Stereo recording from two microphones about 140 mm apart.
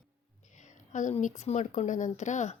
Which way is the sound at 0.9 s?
60° left (ahead or behind).